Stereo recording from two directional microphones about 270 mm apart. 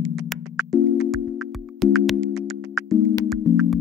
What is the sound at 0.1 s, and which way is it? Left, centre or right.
Music, centre.